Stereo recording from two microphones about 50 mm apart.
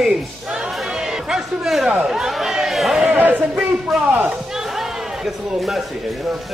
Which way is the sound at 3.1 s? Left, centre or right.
Right.